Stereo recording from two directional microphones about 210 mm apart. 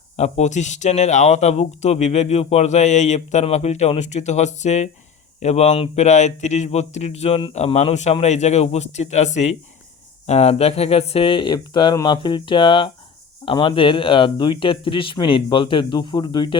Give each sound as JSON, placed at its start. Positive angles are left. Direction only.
{"t": 0.2, "sound": "speech", "side_deg": 35}